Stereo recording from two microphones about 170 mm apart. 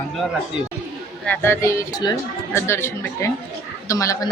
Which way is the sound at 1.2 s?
10° left (ahead or behind).